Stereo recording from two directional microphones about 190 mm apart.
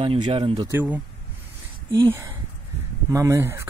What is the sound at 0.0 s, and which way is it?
Speech, 25° right (ahead or behind).